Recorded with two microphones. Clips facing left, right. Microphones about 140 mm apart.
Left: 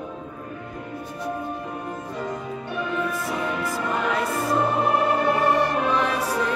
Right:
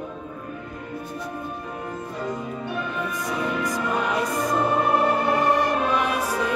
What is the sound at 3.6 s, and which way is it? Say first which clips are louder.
Music: even; 15° right (ahead or behind).